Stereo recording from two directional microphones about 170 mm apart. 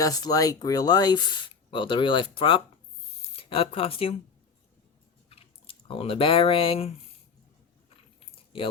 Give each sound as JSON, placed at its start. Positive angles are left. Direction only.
{"t": 0.0, "sound": "speech", "side_deg": 20}
{"t": 5.3, "sound": "speech", "side_deg": 35}
{"t": 7.9, "sound": "keys jangling", "side_deg": 35}